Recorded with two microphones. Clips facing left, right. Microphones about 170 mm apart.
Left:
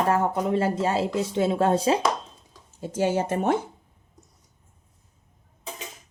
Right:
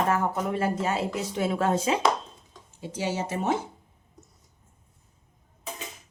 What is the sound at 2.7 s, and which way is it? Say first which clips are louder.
Speech: left 6 dB; 45° left (ahead or behind).